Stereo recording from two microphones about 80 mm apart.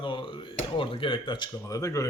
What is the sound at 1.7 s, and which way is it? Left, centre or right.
Speech, left.